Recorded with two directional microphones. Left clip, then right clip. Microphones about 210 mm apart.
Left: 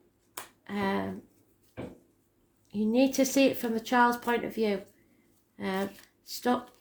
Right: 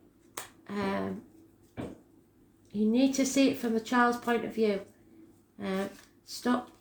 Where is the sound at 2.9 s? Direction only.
45° left (ahead or behind).